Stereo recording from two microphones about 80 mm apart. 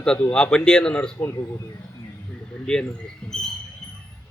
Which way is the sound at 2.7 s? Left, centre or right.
Centre.